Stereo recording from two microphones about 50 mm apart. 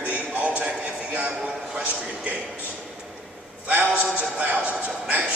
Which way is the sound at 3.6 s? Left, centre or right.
Right.